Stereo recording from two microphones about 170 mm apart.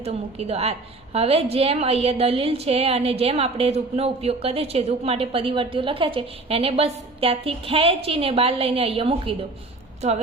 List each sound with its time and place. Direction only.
0.0 s a woman's voice: 35° right (ahead or behind)